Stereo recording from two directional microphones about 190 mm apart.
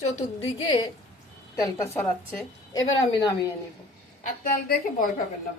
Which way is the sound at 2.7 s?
90° left.